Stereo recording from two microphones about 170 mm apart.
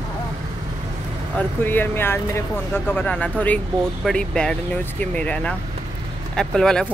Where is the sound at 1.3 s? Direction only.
10° left (ahead or behind).